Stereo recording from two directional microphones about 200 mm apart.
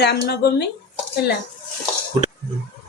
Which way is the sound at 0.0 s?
55° left (ahead or behind).